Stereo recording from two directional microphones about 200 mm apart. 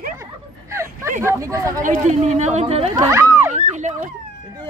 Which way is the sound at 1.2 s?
15° right (ahead or behind).